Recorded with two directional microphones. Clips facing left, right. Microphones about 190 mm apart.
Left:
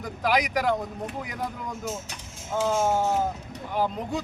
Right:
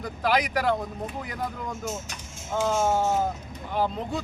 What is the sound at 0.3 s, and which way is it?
Speech, 15° left (ahead or behind).